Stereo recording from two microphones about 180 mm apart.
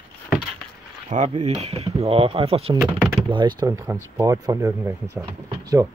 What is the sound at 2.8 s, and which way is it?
Speech, 5° left (ahead or behind).